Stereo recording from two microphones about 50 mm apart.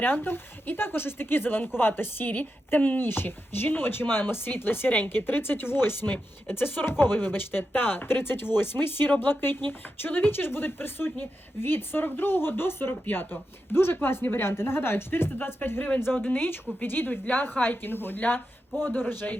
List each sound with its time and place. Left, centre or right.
0.0 s a woman's voice: left
16.1 s speech: left